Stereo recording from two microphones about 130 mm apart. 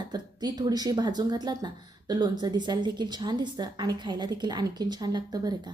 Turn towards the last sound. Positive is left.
turn(degrees=-30)  # may be behind; listen again after turning